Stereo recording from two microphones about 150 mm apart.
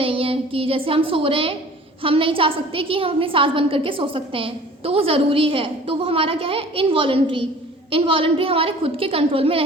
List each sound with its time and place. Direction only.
0.0 s music: 40° right (ahead or behind)
2.0 s a woman's voice: 35° right (ahead or behind)